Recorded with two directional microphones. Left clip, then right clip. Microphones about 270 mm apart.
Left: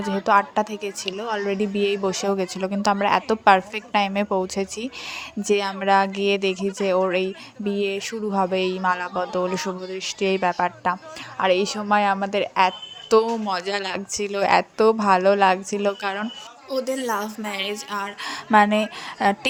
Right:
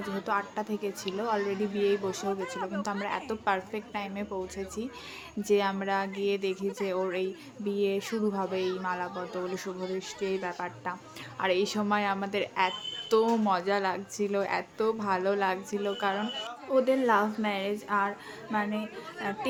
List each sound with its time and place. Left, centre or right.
0.0 s a woman's voice: left
16.7 s a woman's voice: centre
18.3 s a woman's voice: left